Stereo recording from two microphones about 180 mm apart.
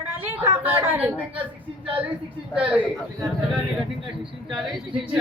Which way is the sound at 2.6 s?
5° right (ahead or behind).